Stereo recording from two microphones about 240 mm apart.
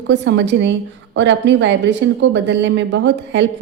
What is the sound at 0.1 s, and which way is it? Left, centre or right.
A woman's voice, right.